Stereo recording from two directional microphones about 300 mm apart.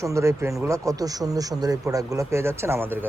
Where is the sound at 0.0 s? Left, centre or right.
Centre.